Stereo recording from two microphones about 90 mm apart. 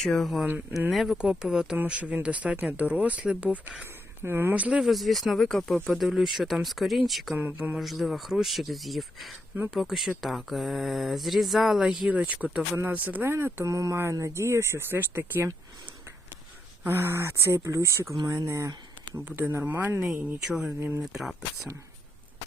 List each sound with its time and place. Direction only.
0.0 s speech: 5° left (ahead or behind); by 3.8 s 15° right (ahead or behind)
4.2 s speech: 25° right (ahead or behind)
4.5 s speech: 15° right (ahead or behind)
4.8 s speech: centre (ahead or behind)
7.3 s speech: 15° right (ahead or behind)
7.8 s speech: centre (ahead or behind)
12.0 s speech: 15° right (ahead or behind)
13.7 s speech: 40° right (ahead or behind)
16.8 s speech: 25° right (ahead or behind)
19.1 s speech: 20° right (ahead or behind)
20.5 s speech: 5° right (ahead or behind)